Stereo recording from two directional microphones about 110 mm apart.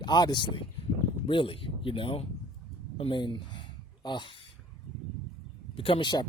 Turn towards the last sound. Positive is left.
turn(degrees=45)  # may be behind; listen again after turning